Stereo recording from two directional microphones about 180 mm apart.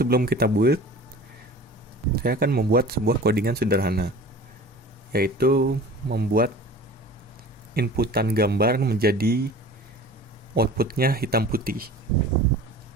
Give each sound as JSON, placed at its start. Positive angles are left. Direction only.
{"t": 0.0, "sound": "speech", "side_deg": -60}
{"t": 2.1, "sound": "speech", "side_deg": -55}
{"t": 5.1, "sound": "speech", "side_deg": -55}
{"t": 7.7, "sound": "speech", "side_deg": -60}
{"t": 10.5, "sound": "speech", "side_deg": -60}